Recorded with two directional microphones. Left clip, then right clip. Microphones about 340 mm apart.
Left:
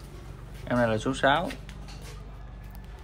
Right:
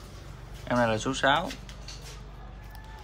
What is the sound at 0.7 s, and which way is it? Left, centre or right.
Speech, centre.